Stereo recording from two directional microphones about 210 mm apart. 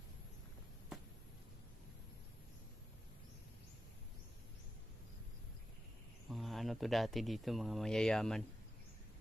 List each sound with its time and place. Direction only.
6.3 s speech: centre (ahead or behind)